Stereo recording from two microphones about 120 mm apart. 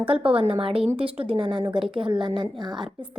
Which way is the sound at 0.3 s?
50° right (ahead or behind).